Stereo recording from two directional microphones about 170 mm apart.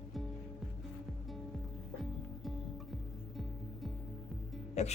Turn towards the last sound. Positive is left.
turn(degrees=40)  # may be behind; listen again after turning